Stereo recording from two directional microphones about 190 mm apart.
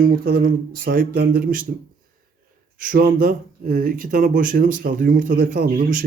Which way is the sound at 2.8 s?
45° right (ahead or behind).